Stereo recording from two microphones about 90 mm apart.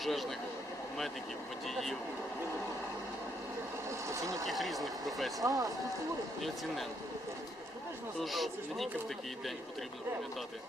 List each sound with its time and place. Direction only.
0.0 s speech: centre (ahead or behind)
1.6 s speech: 5° left (ahead or behind)
4.1 s speech: 35° right (ahead or behind)
4.4 s speech: centre (ahead or behind)
5.5 s speech: 45° right (ahead or behind)
8.2 s speech: centre (ahead or behind)